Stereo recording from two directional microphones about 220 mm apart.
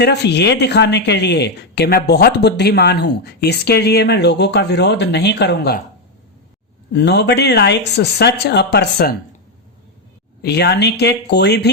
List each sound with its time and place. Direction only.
0.0 s speech: 50° left (ahead or behind)
6.9 s speech: 50° left (ahead or behind)
10.4 s speech: 50° left (ahead or behind)